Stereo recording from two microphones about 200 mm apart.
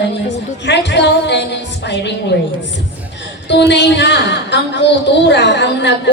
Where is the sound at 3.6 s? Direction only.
60° left (ahead or behind).